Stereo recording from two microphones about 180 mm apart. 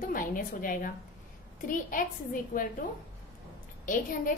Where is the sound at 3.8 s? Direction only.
50° left (ahead or behind).